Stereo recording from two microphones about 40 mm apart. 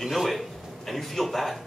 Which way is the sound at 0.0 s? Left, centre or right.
Centre.